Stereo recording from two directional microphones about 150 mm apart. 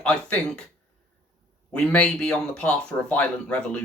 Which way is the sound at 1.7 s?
5° left (ahead or behind).